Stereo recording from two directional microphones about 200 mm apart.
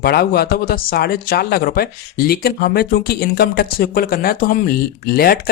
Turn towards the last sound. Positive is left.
turn(degrees=50)  # may be behind; listen again after turning